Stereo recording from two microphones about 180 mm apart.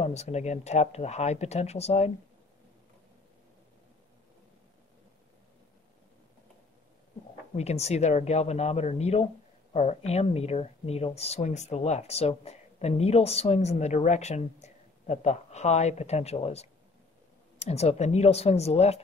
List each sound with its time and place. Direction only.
0.0 s speech: 35° left (ahead or behind)
7.5 s speech: 35° left (ahead or behind)